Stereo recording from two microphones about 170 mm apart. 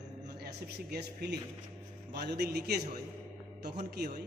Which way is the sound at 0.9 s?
70° right (ahead or behind).